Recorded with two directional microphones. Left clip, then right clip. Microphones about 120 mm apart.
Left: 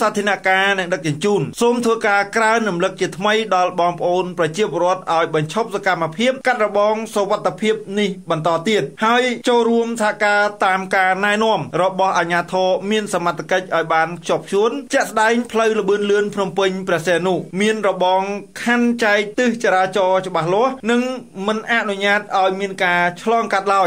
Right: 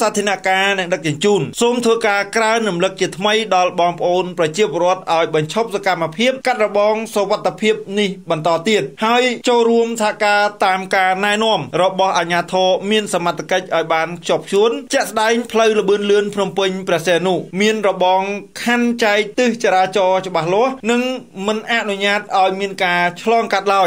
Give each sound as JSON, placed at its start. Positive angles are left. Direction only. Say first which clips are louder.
{"t": 0.0, "sound": "speech", "louder": "right 1 dB", "side_deg": -30}